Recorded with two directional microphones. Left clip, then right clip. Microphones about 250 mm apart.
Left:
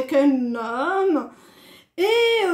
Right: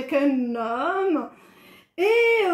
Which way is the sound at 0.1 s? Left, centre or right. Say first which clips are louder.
Left 2 dB; left.